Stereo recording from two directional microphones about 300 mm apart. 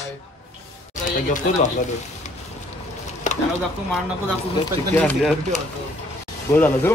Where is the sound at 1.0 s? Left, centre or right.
Left.